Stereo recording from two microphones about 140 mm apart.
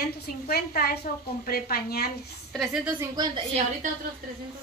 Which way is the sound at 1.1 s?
80° left.